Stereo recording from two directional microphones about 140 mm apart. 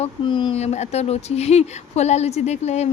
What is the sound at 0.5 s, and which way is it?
Speech, 50° left (ahead or behind).